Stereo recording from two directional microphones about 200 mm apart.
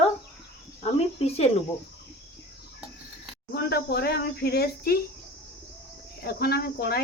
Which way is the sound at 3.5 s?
55° left (ahead or behind).